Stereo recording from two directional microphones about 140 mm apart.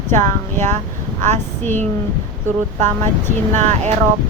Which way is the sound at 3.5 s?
55° right (ahead or behind).